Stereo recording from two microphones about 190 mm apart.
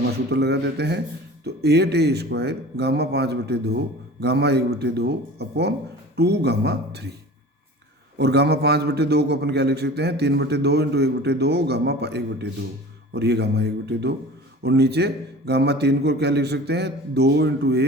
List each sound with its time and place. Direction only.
0.3 s a man's voice: 60° right (ahead or behind)
8.2 s a man's voice: 60° right (ahead or behind)